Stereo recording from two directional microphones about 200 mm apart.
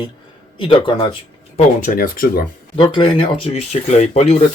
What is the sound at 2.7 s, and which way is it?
Speech, 25° left (ahead or behind).